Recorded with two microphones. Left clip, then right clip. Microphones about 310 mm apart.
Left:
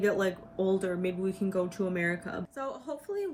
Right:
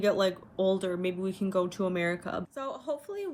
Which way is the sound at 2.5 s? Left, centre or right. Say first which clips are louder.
Right 2 dB; centre.